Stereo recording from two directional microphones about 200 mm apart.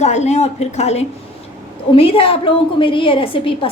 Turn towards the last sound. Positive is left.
turn(degrees=25)  # may be behind; listen again after turning